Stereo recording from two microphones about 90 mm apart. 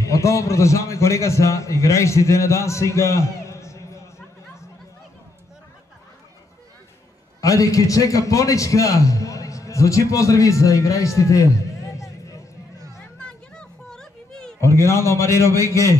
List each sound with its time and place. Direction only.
0.0 s a man's voice: 35° left (ahead or behind)
7.4 s a man's voice: 35° left (ahead or behind)
13.2 s children playing: 10° left (ahead or behind)
14.6 s a man's voice: 35° left (ahead or behind)